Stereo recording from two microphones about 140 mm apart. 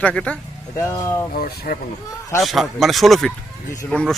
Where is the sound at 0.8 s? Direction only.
20° left (ahead or behind).